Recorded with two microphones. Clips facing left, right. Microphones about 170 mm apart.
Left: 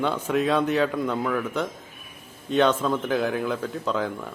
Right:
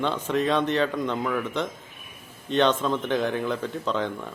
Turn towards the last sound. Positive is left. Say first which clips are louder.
# left 1 dB
turn(degrees=5)  # may be behind; listen again after turning